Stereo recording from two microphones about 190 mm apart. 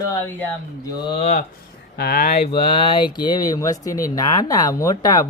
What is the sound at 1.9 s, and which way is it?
Speech, 55° left (ahead or behind).